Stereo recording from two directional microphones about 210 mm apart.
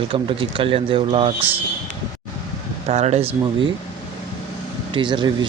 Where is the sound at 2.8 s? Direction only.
30° right (ahead or behind).